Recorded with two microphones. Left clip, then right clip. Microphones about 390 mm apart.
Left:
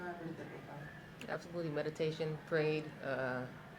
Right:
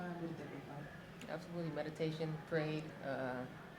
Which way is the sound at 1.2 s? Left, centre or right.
Left.